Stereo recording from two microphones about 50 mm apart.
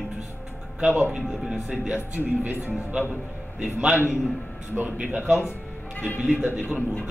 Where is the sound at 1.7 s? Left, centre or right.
Centre.